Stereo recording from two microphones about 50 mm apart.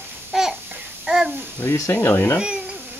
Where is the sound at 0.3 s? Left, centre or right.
Centre.